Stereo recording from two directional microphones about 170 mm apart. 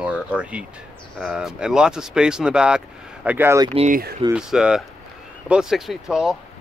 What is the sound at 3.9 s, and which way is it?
Speech, 60° right (ahead or behind).